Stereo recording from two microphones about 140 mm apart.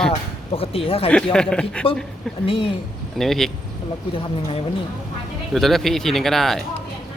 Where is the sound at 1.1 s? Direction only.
5° left (ahead or behind).